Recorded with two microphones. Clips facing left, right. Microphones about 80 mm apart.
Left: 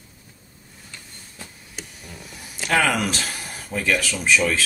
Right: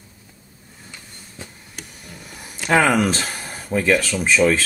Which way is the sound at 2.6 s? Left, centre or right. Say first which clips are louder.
Right 4 dB; right.